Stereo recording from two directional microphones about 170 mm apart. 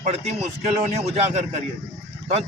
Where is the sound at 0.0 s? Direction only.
45° right (ahead or behind).